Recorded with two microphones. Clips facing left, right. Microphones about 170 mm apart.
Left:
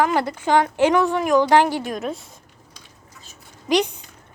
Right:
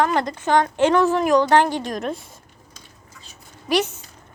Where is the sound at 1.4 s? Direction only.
15° left (ahead or behind).